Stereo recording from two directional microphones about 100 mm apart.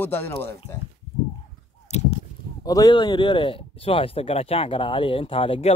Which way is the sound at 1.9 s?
90° left.